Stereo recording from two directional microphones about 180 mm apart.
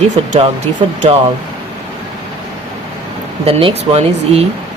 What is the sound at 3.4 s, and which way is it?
Speech, 35° right (ahead or behind).